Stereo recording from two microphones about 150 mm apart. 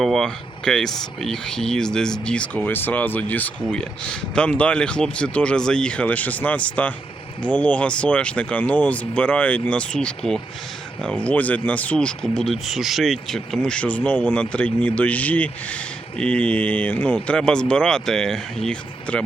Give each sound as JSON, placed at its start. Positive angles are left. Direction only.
{"t": 0.0, "sound": "speech", "side_deg": 0}